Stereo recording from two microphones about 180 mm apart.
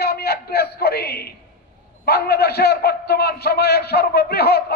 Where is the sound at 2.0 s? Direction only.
60° left (ahead or behind).